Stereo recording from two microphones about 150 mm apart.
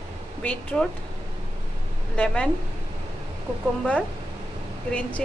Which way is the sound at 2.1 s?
5° left (ahead or behind).